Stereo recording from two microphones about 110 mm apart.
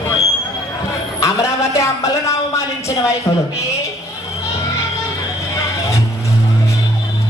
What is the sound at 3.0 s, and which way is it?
Speech, 25° left (ahead or behind).